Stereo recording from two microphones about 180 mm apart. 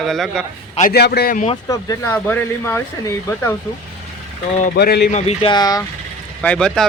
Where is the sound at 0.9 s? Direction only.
60° left (ahead or behind).